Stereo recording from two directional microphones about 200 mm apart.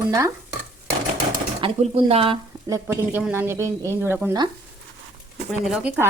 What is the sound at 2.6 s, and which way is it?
Speech, 15° right (ahead or behind).